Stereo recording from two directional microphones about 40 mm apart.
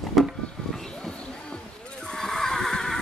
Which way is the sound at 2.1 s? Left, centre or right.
Centre.